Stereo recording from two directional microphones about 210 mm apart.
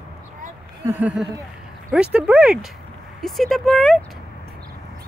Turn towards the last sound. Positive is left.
turn(degrees=0)  # may be behind; listen again after turning